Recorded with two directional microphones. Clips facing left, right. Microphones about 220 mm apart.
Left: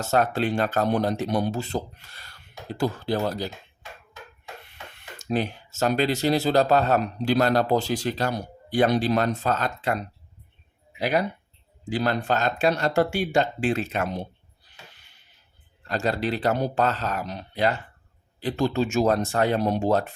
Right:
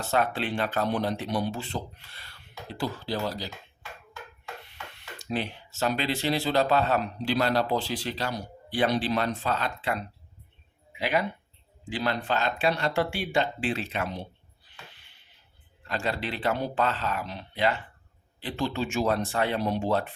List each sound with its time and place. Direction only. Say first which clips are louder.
0.0 s speech: left 4 dB; 40° left (ahead or behind)
5.3 s speech: left 5 dB; 45° left (ahead or behind)
15.8 s speech: left 5 dB; 40° left (ahead or behind)